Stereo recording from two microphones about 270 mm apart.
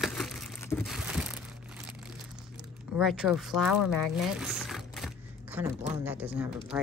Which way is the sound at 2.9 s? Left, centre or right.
Centre.